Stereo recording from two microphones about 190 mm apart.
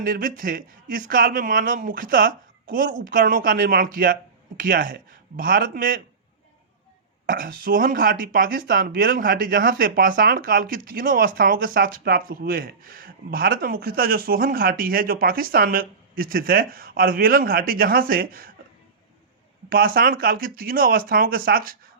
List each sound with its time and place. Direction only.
0.0 s speech: 45° right (ahead or behind)
7.3 s speech: 50° right (ahead or behind)
19.7 s speech: 50° right (ahead or behind)